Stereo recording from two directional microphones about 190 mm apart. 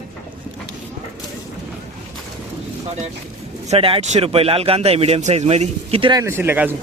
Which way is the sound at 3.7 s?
30° right (ahead or behind).